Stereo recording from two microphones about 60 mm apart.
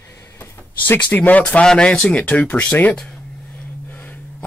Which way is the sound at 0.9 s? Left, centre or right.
Left.